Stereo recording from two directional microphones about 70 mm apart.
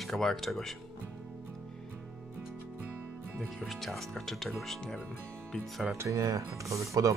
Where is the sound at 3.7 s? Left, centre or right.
Centre.